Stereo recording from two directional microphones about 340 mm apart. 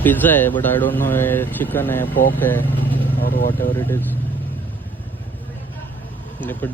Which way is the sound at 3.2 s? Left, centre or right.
Left.